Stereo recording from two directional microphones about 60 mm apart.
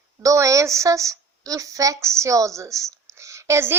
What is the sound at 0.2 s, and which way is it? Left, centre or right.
A woman's voice, right.